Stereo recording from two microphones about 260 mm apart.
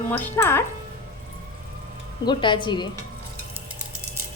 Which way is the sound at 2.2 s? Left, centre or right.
Centre.